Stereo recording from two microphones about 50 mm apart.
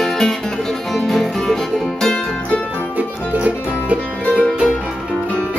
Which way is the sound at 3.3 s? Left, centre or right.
Right.